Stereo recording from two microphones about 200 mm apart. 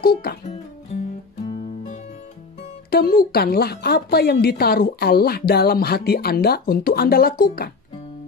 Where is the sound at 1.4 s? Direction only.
30° left (ahead or behind).